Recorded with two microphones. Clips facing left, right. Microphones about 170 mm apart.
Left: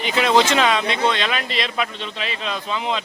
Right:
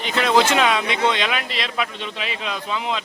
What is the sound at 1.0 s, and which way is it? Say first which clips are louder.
A man's voice: even; 15° right (ahead or behind).